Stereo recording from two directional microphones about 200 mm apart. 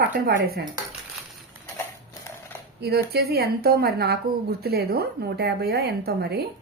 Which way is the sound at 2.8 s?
55° right (ahead or behind).